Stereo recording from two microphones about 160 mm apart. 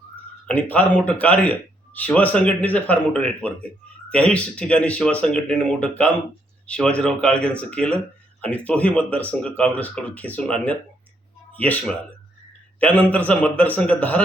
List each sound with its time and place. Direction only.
0.4 s speech: 10° left (ahead or behind)